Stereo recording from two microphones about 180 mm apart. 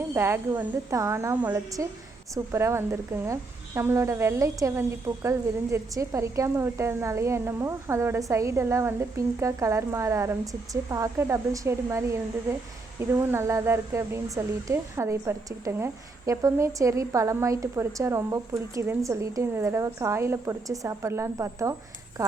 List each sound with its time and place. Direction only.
0.1 s a woman's voice: 15° right (ahead or behind)